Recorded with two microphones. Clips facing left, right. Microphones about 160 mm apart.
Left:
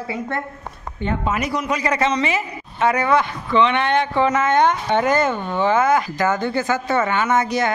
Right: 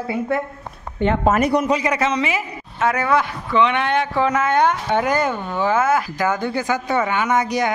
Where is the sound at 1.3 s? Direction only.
50° right (ahead or behind).